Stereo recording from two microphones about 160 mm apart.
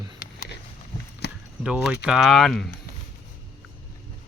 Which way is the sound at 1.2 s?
90° left.